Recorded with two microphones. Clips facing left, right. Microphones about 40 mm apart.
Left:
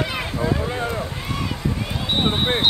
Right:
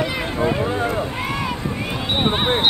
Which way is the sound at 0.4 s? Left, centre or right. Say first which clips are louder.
Right 4 dB; right.